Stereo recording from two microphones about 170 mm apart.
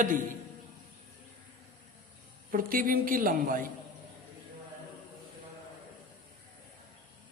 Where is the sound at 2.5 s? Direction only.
55° right (ahead or behind).